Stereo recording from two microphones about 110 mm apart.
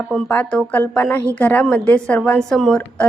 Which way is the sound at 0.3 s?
15° left (ahead or behind).